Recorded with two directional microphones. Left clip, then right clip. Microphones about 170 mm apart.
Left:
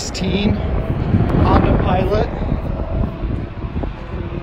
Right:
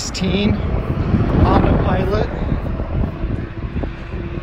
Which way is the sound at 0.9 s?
60° left (ahead or behind).